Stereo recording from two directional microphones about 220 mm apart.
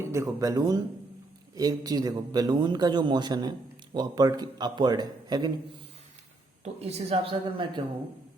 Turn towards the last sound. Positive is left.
turn(degrees=-25)  # may be behind; listen again after turning